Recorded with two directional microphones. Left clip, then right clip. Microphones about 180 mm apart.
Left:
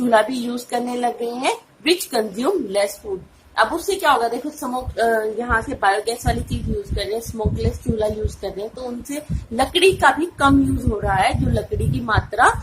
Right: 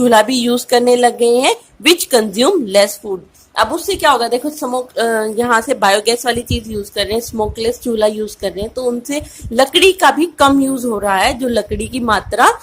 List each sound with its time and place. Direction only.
0.1 s a woman's voice: 60° right (ahead or behind)